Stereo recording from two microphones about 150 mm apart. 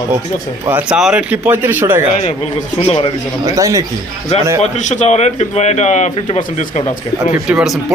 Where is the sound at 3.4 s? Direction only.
20° right (ahead or behind).